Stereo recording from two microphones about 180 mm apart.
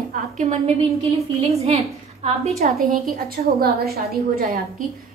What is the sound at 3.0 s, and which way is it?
A woman's voice, 55° right (ahead or behind).